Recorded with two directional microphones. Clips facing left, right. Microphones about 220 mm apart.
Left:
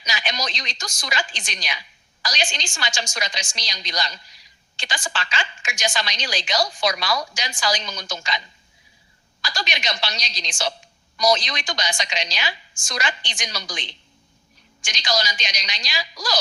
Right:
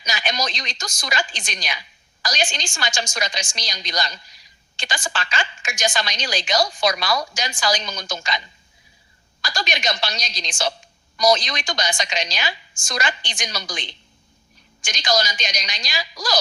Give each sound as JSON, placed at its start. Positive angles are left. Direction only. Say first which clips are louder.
{"t": 0.0, "sound": "a woman's voice", "louder": "right 3 dB", "side_deg": -45}
{"t": 9.4, "sound": "a woman's voice", "louder": "right 3 dB", "side_deg": -45}
{"t": 14.8, "sound": "a woman's voice", "louder": "right 3 dB", "side_deg": -45}